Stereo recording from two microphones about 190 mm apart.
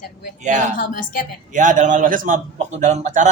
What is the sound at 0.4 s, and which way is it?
Speech, 40° right (ahead or behind).